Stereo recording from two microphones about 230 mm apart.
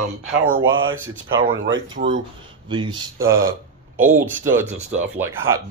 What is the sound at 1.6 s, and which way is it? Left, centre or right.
Speech, right.